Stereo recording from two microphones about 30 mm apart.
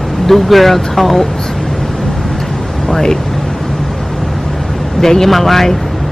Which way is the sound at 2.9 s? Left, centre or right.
Centre.